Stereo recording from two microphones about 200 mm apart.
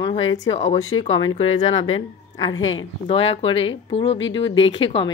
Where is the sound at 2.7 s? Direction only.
30° left (ahead or behind).